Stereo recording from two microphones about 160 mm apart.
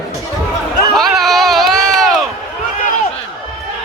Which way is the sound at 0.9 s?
Centre (ahead or behind).